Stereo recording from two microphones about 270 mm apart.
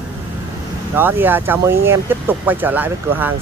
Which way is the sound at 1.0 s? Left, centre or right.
Centre.